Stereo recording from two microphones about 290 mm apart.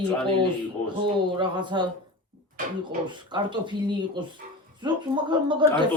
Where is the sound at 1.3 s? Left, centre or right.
Centre.